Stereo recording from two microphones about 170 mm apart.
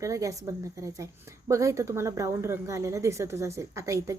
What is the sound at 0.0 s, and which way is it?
A woman's voice, 20° right (ahead or behind).